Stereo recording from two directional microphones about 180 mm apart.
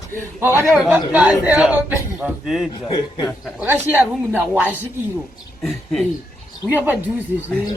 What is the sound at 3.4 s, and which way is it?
A woman's voice, 10° right (ahead or behind).